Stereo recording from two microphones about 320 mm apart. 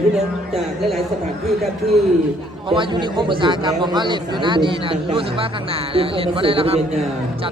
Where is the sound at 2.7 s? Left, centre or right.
Centre.